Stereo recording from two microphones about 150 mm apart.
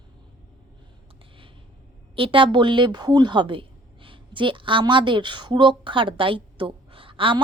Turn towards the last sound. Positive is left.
turn(degrees=-35)  # may be behind; listen again after turning